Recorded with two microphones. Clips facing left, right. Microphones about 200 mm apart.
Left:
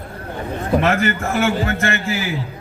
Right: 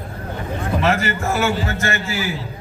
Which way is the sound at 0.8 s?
55° left (ahead or behind).